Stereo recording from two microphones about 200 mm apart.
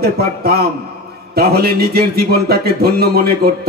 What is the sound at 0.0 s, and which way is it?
Music, 50° right (ahead or behind).